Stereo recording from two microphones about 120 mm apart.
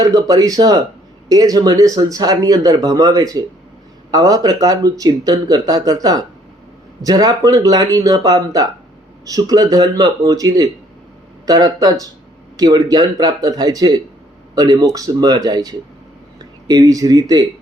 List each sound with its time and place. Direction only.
0.0 s speech: 30° right (ahead or behind)